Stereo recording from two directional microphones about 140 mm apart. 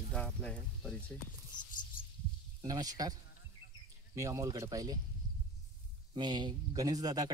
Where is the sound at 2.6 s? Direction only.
25° right (ahead or behind).